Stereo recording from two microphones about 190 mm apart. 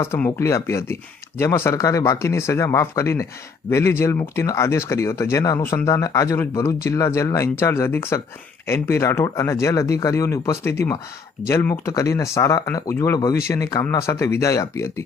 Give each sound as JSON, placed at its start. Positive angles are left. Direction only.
{"t": 0.0, "sound": "speech", "side_deg": 15}